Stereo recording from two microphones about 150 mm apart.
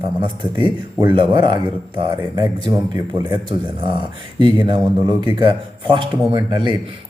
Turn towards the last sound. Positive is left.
turn(degrees=-35)  # may be behind; listen again after turning